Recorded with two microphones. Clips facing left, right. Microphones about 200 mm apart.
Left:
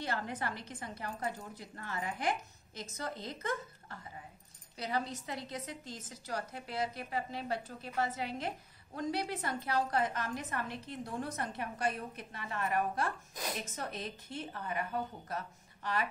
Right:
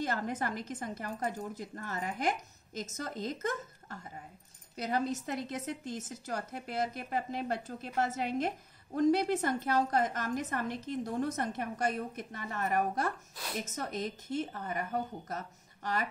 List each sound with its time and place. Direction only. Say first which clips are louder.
0.0 s a woman's voice: right 4 dB; 45° right (ahead or behind)